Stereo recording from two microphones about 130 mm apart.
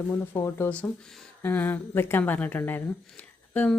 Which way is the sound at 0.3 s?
20° left (ahead or behind).